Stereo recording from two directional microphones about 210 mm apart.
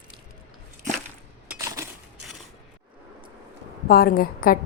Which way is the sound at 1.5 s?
15° right (ahead or behind).